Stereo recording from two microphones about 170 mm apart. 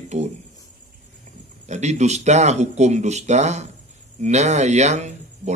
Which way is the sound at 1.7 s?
40° right (ahead or behind).